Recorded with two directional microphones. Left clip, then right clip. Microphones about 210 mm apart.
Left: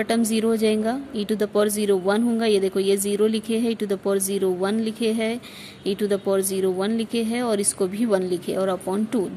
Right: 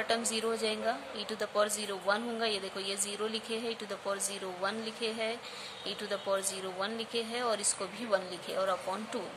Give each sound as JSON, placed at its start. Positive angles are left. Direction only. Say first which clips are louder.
{"t": 0.3, "sound": "speech", "louder": "left 11 dB", "side_deg": 30}